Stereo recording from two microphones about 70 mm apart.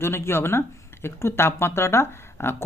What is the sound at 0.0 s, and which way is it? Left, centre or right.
Speech, left.